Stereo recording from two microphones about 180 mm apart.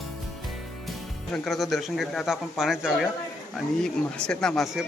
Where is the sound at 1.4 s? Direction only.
Centre (ahead or behind).